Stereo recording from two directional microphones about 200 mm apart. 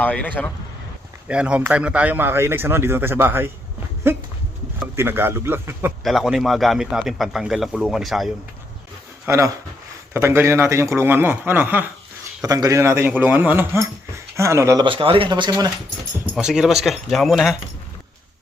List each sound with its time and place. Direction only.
0.0 s a man's voice: 5° left (ahead or behind)
1.3 s a man's voice: 5° right (ahead or behind)
4.9 s a man's voice: 10° right (ahead or behind)
9.2 s a man's voice: 15° right (ahead or behind)
16.3 s a man's voice: 5° right (ahead or behind)